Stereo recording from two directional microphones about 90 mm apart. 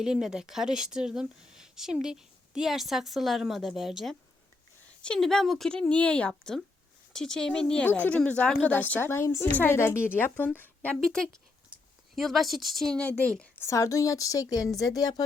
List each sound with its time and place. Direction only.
0.0 s a woman's voice: 5° right (ahead or behind); by 10.9 s 20° left (ahead or behind)
11.0 s a woman's voice: 5° left (ahead or behind)
13.6 s speech: 35° left (ahead or behind)